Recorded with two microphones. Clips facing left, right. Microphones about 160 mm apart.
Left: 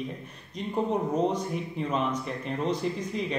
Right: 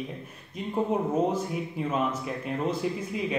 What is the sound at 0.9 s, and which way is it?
Speech, 5° right (ahead or behind).